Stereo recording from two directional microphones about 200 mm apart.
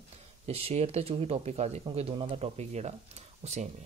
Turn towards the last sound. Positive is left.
turn(degrees=-35)  # may be behind; listen again after turning